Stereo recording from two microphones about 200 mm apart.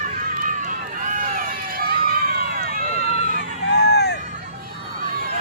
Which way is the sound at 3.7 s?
60° left (ahead or behind).